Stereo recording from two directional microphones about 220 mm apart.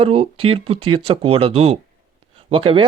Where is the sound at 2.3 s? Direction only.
25° right (ahead or behind).